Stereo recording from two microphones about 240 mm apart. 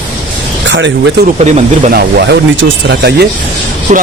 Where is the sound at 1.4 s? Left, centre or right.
Right.